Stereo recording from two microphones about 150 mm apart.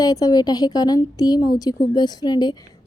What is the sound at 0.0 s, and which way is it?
A woman's voice, 25° left (ahead or behind).